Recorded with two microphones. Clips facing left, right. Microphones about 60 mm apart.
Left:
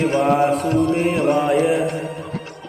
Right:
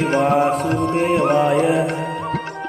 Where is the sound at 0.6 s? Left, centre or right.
Right.